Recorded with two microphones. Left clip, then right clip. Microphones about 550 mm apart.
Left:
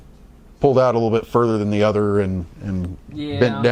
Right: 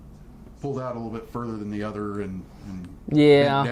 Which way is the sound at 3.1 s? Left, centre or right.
Right.